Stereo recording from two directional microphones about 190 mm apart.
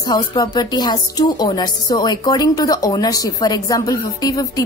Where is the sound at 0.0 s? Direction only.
20° left (ahead or behind).